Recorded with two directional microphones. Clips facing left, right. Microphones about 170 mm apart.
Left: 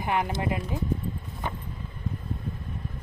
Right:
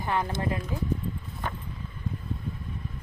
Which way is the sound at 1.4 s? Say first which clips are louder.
Left 1 dB; 15° left (ahead or behind).